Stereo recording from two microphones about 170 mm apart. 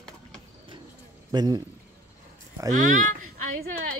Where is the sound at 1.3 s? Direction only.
20° right (ahead or behind).